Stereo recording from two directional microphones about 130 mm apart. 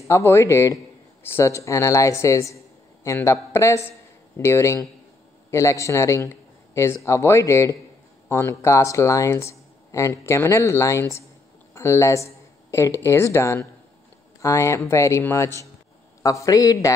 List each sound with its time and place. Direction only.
0.1 s a man's voice: 20° left (ahead or behind)